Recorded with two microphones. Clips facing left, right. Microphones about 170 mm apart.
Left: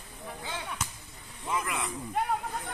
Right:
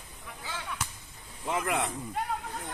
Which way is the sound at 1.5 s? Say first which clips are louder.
Right 3 dB; 60° right (ahead or behind).